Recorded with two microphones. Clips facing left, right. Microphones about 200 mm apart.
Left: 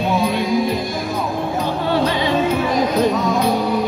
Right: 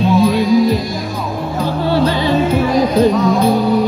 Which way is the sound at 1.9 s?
35° right (ahead or behind).